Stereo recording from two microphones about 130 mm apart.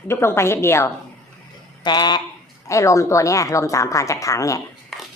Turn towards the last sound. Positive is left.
turn(degrees=5)  # may be behind; listen again after turning